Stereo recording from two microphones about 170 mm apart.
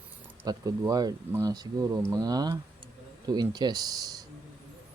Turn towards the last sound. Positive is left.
turn(degrees=-20)  # may be behind; listen again after turning